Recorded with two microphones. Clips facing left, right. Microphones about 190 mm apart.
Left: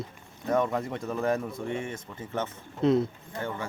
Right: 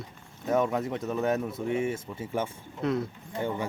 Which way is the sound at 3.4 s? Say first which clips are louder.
Right 3 dB; 15° right (ahead or behind).